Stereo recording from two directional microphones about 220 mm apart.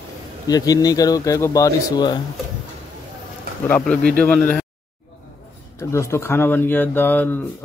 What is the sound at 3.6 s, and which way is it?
Speech, 5° left (ahead or behind).